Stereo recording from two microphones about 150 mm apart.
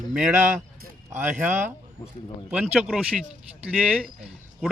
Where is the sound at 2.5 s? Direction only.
10° right (ahead or behind).